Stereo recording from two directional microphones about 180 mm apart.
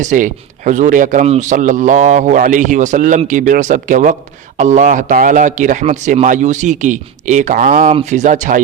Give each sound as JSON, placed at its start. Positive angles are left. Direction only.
{"t": 0.0, "sound": "a man's voice", "side_deg": -45}